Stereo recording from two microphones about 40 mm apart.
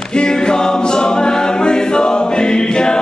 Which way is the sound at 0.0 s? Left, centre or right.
Left.